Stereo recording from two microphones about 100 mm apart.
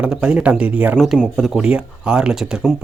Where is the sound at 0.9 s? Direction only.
5° right (ahead or behind).